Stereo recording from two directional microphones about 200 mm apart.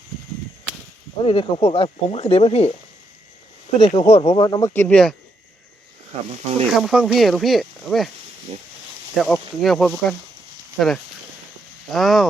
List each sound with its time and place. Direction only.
1.2 s speech: 25° left (ahead or behind)
3.8 s speech: 30° left (ahead or behind); by 5.1 s 5° left (ahead or behind)
6.1 s speech: 30° right (ahead or behind)
6.7 s speech: centre (ahead or behind)
9.2 s speech: centre (ahead or behind)